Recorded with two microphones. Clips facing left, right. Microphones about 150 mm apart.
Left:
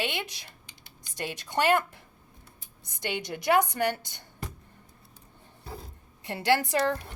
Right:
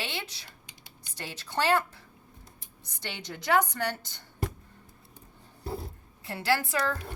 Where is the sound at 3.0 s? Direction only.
15° left (ahead or behind).